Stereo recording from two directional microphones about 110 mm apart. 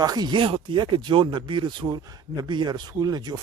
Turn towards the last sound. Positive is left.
turn(degrees=-40)  # may be behind; listen again after turning